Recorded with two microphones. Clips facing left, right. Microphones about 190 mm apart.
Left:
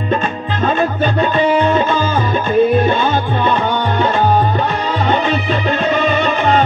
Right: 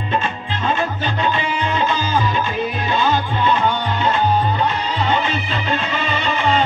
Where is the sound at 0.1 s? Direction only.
50° left (ahead or behind).